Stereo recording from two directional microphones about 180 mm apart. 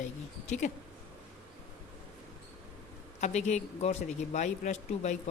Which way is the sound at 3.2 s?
40° left (ahead or behind).